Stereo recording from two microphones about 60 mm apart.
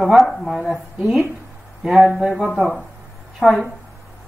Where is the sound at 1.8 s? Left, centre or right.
Centre.